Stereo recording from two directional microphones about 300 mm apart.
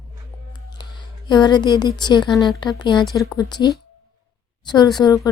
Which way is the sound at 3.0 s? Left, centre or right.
Centre.